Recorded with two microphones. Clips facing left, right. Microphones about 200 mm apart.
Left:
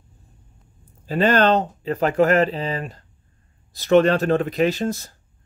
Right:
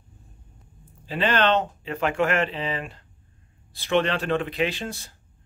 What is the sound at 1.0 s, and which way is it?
Speech, 45° left (ahead or behind).